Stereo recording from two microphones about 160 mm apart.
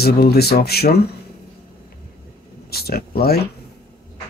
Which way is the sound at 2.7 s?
75° left (ahead or behind).